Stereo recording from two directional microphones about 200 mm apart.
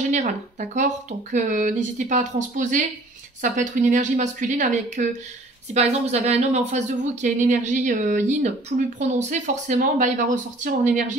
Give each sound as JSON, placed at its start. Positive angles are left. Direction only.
{"t": 0.1, "sound": "speech", "side_deg": -35}